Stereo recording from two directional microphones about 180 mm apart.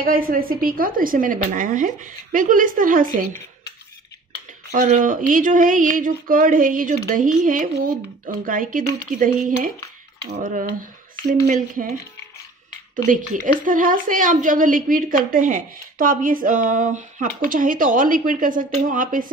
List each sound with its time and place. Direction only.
0.0 s speech: 50° right (ahead or behind)
4.6 s speech: 45° right (ahead or behind)
10.3 s speech: 45° right (ahead or behind)
12.9 s speech: 45° right (ahead or behind)